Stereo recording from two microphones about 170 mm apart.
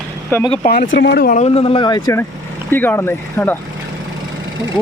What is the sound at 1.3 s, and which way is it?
Speech, 45° left (ahead or behind).